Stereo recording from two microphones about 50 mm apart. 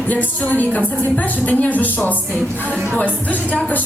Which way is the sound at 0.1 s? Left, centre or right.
Left.